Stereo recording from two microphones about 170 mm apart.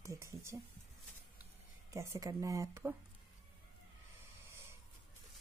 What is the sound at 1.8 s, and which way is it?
Speech, 15° right (ahead or behind).